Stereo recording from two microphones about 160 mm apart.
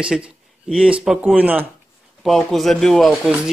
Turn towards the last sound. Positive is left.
turn(degrees=0)  # may be behind; listen again after turning